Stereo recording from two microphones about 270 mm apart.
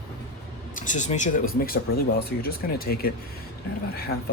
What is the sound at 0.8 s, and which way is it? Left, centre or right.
Speech, left.